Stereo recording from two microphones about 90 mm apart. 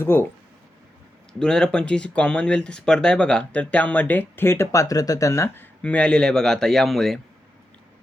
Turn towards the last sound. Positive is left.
turn(degrees=5)  # may be behind; listen again after turning